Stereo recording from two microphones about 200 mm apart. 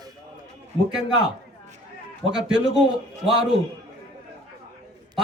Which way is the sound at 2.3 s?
5° right (ahead or behind).